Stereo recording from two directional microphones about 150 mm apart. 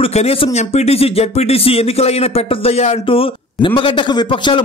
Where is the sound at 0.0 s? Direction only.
40° left (ahead or behind).